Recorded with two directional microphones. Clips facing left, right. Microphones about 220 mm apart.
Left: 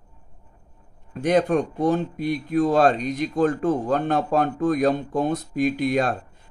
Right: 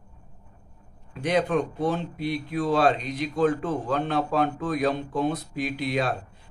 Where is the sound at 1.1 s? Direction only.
45° left (ahead or behind).